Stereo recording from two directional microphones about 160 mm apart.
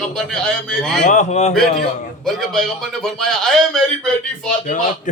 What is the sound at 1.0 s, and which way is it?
Speech, 50° left (ahead or behind).